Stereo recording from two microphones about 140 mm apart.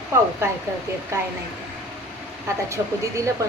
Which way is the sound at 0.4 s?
20° right (ahead or behind).